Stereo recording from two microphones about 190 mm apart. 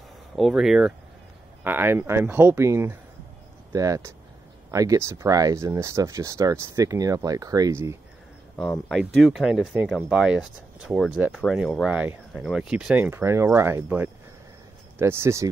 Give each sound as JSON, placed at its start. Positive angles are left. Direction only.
{"t": 0.4, "sound": "speech", "side_deg": 0}
{"t": 8.5, "sound": "speech", "side_deg": 5}